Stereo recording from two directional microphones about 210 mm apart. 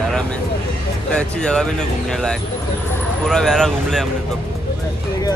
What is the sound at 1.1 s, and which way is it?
Speech, 5° left (ahead or behind).